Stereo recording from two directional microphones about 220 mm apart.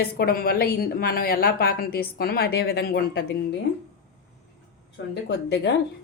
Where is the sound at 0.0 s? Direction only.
40° left (ahead or behind).